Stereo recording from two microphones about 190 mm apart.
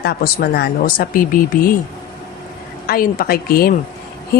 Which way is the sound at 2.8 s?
50° left (ahead or behind).